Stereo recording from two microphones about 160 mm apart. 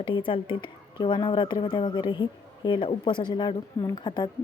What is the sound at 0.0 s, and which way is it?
Speech, 30° left (ahead or behind).